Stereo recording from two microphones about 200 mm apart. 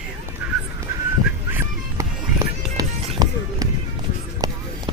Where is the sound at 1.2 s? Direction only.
10° right (ahead or behind).